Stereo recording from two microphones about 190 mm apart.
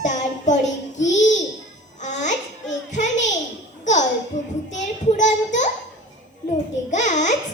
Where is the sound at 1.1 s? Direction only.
40° left (ahead or behind).